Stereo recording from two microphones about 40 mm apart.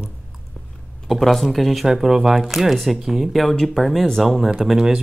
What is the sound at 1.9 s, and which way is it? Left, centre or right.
Speech, centre.